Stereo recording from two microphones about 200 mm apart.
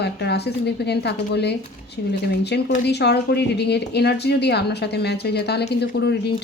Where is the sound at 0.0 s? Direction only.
55° left (ahead or behind).